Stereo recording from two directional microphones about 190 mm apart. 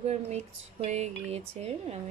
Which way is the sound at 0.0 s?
35° right (ahead or behind).